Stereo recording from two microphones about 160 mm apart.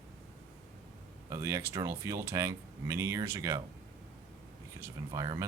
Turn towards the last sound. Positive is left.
turn(degrees=-20)  # may be behind; listen again after turning